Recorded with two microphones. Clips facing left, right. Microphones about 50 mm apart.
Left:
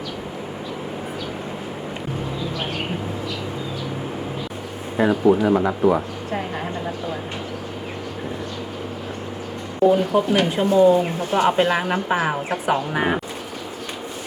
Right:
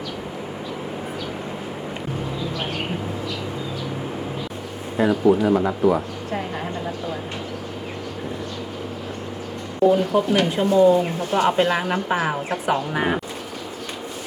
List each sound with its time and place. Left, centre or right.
5.2 s speech: left
6.3 s speech: centre
9.9 s speech: centre